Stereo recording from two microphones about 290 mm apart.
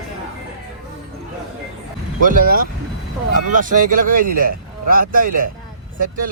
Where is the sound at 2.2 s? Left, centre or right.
Right.